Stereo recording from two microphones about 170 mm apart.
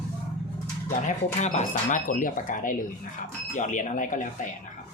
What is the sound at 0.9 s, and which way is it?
Speech, 45° left (ahead or behind).